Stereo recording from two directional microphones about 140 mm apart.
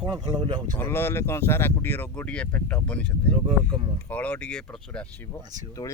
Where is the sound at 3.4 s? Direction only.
40° right (ahead or behind).